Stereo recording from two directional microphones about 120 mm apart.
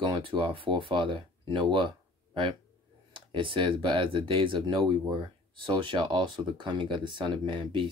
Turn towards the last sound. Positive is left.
turn(degrees=-45)  # may be behind; listen again after turning